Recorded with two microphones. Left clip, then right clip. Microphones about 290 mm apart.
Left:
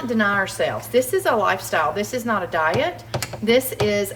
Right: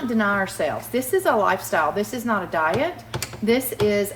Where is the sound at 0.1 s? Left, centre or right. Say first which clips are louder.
Left 2 dB; centre.